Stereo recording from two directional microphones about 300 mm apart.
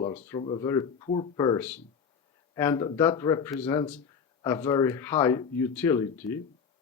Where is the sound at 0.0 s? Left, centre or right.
Left.